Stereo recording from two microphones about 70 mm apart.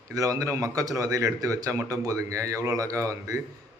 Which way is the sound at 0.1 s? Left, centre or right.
Right.